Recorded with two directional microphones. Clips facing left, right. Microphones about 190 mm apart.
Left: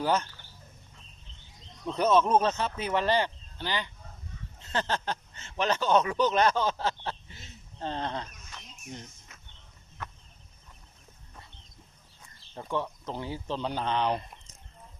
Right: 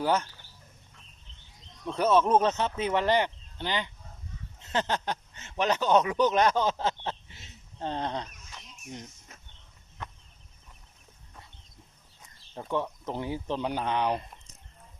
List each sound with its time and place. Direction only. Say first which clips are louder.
0.0 s speech: right 1 dB; 10° right (ahead or behind)
1.9 s speech: even; 10° right (ahead or behind)
7.8 s a sound: right 1 dB; 15° right (ahead or behind)
12.7 s speech: right 2 dB; 15° right (ahead or behind)